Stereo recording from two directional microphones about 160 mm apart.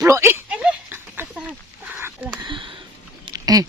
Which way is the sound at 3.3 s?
20° right (ahead or behind).